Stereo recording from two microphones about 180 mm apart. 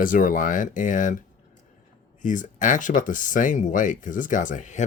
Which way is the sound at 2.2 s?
45° left (ahead or behind).